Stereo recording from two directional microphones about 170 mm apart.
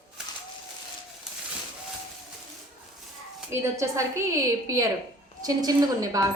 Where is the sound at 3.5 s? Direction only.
15° right (ahead or behind).